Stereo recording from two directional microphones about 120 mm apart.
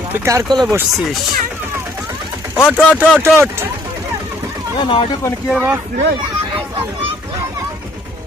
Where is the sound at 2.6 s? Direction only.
10° right (ahead or behind).